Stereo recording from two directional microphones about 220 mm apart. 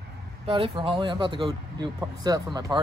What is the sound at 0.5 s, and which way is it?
Speech, 25° right (ahead or behind).